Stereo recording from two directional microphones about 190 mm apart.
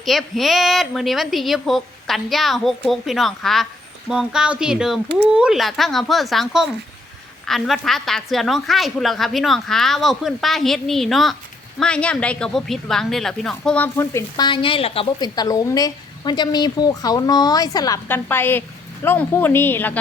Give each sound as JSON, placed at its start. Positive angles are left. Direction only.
{"t": 0.0, "sound": "a woman's voice", "side_deg": 0}